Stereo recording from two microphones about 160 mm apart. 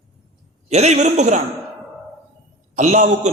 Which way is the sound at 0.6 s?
45° right (ahead or behind).